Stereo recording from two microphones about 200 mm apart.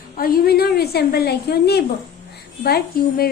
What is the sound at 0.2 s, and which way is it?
A woman's voice, 50° left (ahead or behind).